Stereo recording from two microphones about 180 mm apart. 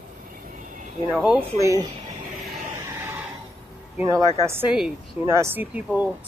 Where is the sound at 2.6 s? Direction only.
15° right (ahead or behind).